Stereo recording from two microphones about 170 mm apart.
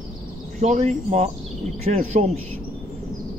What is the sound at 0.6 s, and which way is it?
Speech, 45° right (ahead or behind).